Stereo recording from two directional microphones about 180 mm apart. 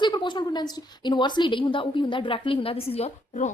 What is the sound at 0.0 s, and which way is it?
A woman's voice, 25° left (ahead or behind).